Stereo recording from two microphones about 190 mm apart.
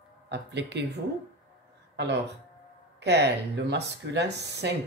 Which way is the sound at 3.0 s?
60° right (ahead or behind).